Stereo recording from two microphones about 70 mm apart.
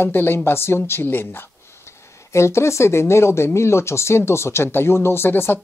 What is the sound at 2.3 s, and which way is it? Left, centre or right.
Speech, left.